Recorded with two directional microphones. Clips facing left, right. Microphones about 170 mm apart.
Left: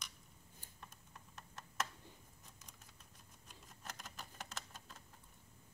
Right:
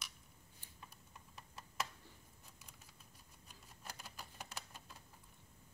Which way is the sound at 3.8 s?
10° right (ahead or behind).